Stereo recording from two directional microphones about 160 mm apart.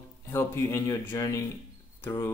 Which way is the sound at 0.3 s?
15° left (ahead or behind).